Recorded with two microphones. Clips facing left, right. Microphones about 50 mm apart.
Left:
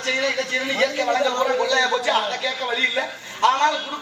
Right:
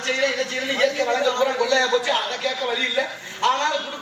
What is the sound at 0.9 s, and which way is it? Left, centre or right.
A woman's voice, left.